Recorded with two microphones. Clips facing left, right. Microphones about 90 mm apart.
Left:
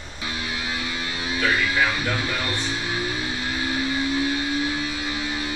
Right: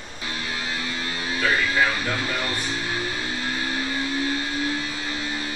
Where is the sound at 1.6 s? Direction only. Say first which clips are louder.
Even; 20° left (ahead or behind).